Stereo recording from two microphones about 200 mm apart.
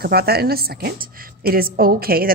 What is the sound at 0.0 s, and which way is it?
A woman's voice, 50° right (ahead or behind).